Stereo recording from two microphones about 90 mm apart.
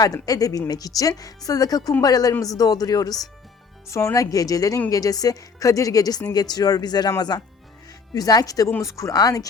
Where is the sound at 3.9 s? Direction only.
35° left (ahead or behind); by 7.1 s 50° left (ahead or behind).